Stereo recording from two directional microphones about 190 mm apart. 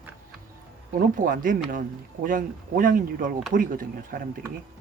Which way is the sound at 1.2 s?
45° right (ahead or behind).